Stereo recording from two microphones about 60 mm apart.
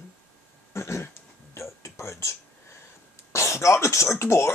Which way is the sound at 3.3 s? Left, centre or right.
Left.